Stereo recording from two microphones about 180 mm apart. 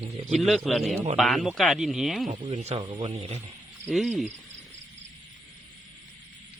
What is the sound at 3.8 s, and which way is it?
Speech, centre (ahead or behind).